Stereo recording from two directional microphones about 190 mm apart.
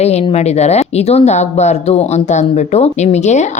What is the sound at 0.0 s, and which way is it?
Speech, 35° left (ahead or behind).